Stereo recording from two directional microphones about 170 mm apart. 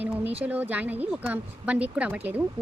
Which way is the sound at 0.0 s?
10° right (ahead or behind).